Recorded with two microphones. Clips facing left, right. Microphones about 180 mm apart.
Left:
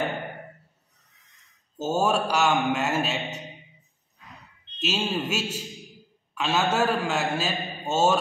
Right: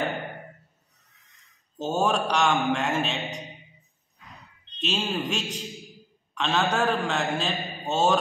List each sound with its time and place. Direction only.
1.8 s a man's voice: 5° left (ahead or behind)
4.7 s a man's voice: 5° left (ahead or behind)